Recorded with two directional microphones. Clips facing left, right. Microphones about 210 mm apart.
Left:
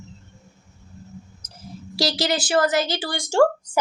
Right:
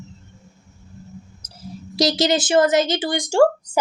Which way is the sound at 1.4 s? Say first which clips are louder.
Right 5 dB; 10° right (ahead or behind).